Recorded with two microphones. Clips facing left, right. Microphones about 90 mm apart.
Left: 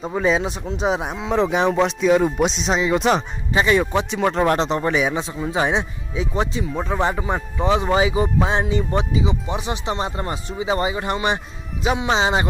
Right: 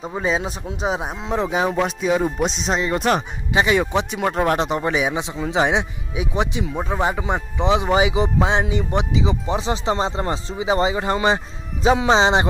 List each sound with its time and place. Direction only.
0.0 s speech: 5° right (ahead or behind)
3.2 s speech: 15° right (ahead or behind)
9.2 s speech: 30° right (ahead or behind)